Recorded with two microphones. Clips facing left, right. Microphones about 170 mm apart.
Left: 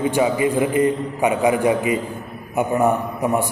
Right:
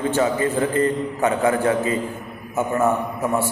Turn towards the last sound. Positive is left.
turn(degrees=15)  # may be behind; listen again after turning